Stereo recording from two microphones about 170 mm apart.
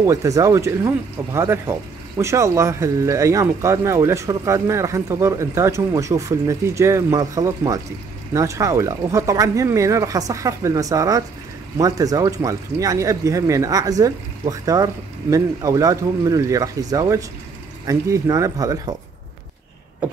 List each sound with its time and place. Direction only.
0.0 s speech: 20° right (ahead or behind)